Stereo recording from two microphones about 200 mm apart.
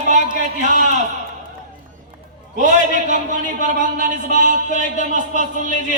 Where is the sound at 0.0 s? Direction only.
35° right (ahead or behind).